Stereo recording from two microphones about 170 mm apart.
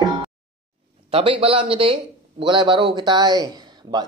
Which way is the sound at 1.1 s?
30° right (ahead or behind).